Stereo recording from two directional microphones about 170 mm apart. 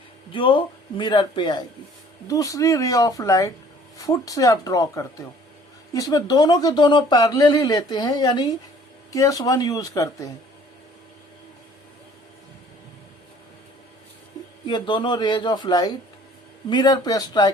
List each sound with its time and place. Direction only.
0.3 s speech: 30° left (ahead or behind)
14.7 s speech: 25° left (ahead or behind)